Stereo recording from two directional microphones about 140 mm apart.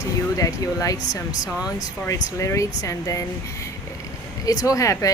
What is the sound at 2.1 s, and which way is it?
Speech, 20° left (ahead or behind).